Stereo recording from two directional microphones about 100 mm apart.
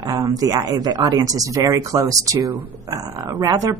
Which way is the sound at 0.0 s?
40° right (ahead or behind).